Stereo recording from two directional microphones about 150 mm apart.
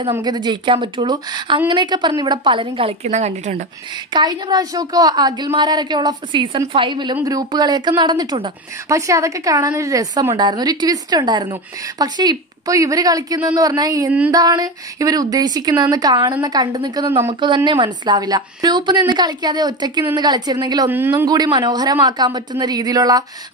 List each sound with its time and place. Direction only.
0.2 s a woman's voice: 30° right (ahead or behind); by 3.6 s 50° right (ahead or behind)
4.1 s a woman's voice: 30° right (ahead or behind)
20.9 s speech: 15° right (ahead or behind)
21.3 s speech: 30° right (ahead or behind)